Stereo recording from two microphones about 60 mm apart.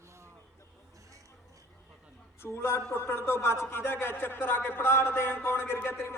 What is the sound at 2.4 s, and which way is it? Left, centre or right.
A man's voice, left.